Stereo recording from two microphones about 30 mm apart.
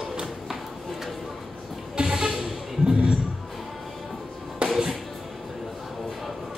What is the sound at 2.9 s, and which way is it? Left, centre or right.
Music, right.